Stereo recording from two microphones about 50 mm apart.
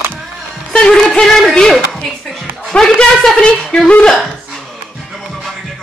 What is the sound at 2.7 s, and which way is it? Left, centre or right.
A woman's voice, centre.